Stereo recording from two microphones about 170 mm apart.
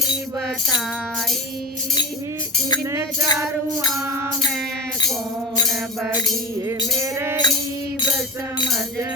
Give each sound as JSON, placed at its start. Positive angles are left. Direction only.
{"t": 2.9, "sound": "music", "side_deg": -15}
{"t": 6.7, "sound": "music", "side_deg": -15}